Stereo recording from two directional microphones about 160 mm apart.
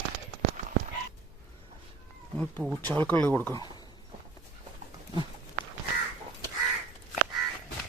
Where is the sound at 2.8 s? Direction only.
10° left (ahead or behind).